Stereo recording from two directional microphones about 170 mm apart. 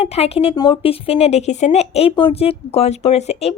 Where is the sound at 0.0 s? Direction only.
35° left (ahead or behind).